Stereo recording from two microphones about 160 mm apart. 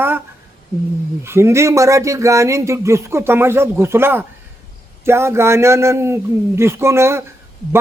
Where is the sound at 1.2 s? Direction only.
15° right (ahead or behind).